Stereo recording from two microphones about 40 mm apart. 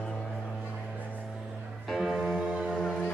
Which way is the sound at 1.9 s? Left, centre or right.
Centre.